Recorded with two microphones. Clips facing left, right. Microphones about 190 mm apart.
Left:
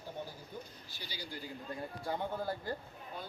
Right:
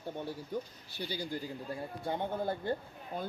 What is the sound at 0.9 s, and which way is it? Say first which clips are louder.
Speech: right 11 dB; 55° right (ahead or behind).